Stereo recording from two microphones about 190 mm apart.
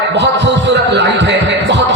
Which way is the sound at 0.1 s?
65° right (ahead or behind).